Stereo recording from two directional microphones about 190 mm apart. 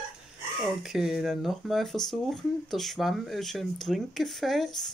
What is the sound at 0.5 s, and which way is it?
Speech, centre (ahead or behind).